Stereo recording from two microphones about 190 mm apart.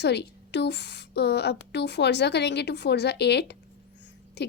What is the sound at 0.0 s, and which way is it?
A woman's voice, 65° left (ahead or behind).